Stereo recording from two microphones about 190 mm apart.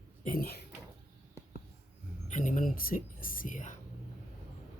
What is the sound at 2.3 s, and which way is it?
Speech, 40° left (ahead or behind).